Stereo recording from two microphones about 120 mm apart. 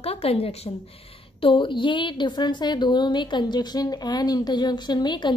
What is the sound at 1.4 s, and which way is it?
A woman's voice, 45° left (ahead or behind).